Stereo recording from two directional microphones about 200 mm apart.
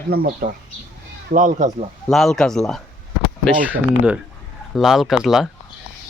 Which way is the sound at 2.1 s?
Centre (ahead or behind).